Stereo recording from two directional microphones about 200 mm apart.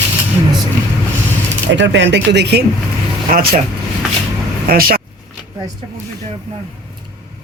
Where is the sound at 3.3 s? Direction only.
45° right (ahead or behind).